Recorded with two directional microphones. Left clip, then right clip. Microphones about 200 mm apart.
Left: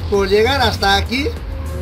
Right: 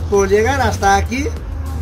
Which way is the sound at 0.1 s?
15° right (ahead or behind).